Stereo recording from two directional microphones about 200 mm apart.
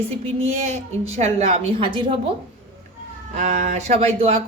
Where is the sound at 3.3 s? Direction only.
35° right (ahead or behind).